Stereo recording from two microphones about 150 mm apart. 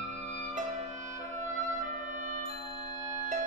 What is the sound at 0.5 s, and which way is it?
Music, 55° right (ahead or behind).